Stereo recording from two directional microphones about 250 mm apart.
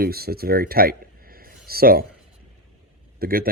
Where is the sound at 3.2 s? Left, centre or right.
Right.